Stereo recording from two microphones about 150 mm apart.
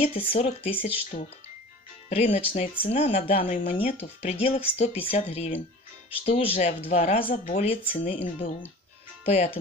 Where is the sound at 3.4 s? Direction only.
60° left (ahead or behind).